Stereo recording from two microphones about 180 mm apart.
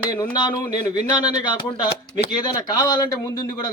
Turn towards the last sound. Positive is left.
turn(degrees=20)  # may be behind; listen again after turning